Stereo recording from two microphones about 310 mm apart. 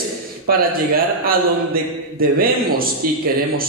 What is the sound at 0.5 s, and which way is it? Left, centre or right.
A man's voice, right.